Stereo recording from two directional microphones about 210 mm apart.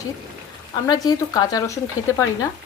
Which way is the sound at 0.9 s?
20° left (ahead or behind).